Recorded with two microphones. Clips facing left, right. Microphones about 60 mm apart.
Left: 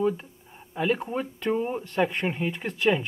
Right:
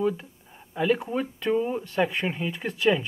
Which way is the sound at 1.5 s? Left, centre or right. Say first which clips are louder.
Right 2 dB; left.